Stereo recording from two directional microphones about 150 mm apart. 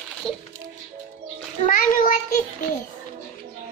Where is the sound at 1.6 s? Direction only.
65° left (ahead or behind).